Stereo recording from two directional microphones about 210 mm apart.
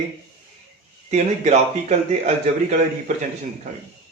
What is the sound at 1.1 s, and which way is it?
Speech, 35° right (ahead or behind).